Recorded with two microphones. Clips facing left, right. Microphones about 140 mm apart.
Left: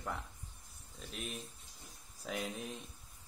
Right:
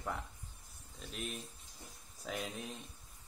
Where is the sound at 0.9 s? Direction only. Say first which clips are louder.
Right 1 dB; centre (ahead or behind).